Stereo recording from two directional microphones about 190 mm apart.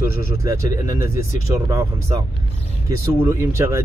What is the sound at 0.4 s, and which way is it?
Speech, 15° right (ahead or behind).